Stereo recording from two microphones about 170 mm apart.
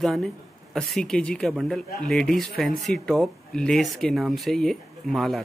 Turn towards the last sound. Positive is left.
turn(degrees=0)  # may be behind; listen again after turning